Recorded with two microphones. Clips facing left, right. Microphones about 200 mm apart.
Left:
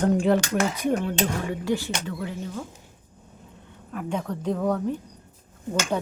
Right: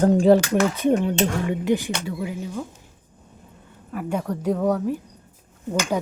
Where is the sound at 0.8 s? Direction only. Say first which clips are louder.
Right 5 dB; 25° right (ahead or behind).